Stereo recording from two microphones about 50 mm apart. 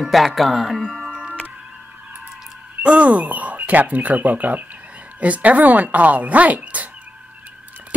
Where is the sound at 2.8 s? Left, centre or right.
Right.